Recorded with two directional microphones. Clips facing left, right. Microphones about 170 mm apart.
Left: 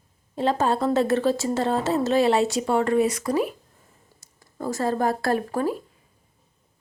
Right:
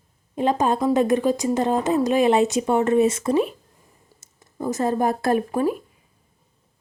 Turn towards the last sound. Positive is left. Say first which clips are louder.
# right 3 dB
turn(degrees=-15)  # may be behind; listen again after turning